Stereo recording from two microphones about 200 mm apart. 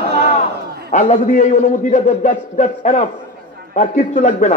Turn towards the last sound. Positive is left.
turn(degrees=35)  # may be behind; listen again after turning